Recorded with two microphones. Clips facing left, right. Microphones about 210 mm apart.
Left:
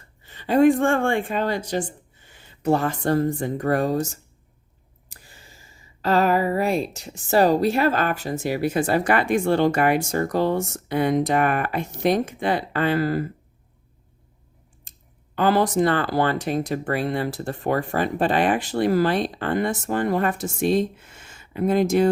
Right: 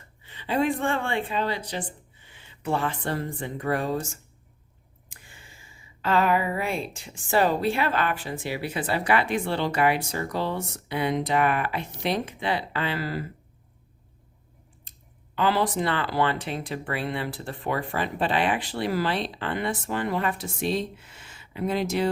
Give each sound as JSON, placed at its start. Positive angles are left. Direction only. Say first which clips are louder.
{"t": 0.2, "sound": "speech", "louder": "left 8 dB", "side_deg": 45}
{"t": 14.9, "sound": "a sound", "louder": "even", "side_deg": 45}
{"t": 15.4, "sound": "speech", "louder": "left 5 dB", "side_deg": 45}